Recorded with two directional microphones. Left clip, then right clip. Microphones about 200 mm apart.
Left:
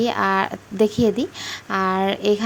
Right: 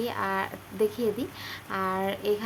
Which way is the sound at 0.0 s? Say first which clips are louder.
Left 10 dB; 40° left (ahead or behind).